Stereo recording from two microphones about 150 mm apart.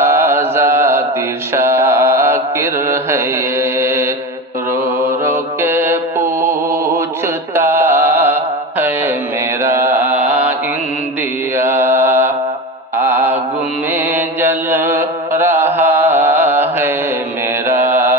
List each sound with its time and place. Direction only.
0.0 s mantra: 15° right (ahead or behind)
5.2 s mantra: 15° right (ahead or behind)
7.5 s music: 15° right (ahead or behind)
9.6 s mantra: 15° right (ahead or behind)
11.5 s mantra: 15° right (ahead or behind)